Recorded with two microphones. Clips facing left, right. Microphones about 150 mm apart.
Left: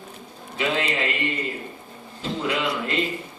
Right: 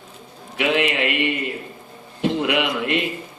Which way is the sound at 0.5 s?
65° right (ahead or behind).